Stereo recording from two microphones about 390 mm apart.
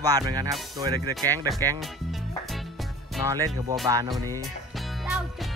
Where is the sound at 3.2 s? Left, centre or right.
Centre.